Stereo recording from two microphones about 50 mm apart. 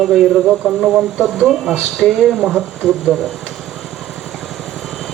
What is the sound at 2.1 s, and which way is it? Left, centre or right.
Speech, centre.